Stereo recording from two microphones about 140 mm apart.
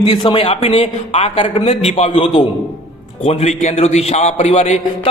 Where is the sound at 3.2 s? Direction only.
50° left (ahead or behind).